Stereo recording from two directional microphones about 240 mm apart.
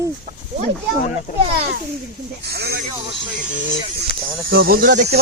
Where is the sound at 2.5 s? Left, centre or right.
Right.